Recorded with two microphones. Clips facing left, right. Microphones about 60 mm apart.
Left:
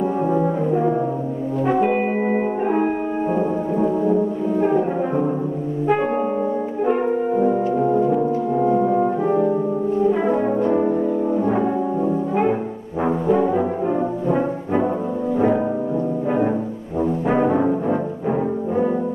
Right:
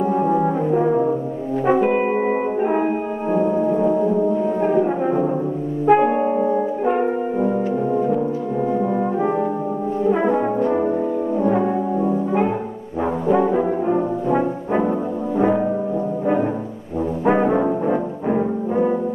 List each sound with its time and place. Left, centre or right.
0.2 s brass instrument: centre
1.8 s music: centre
5.9 s french horn: centre
8.6 s brass instrument: centre
10.1 s brass instrument: centre
13.3 s brass instrument: centre
17.3 s brass instrument: centre